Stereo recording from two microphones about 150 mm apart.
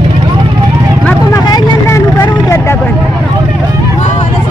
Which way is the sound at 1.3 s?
20° left (ahead or behind).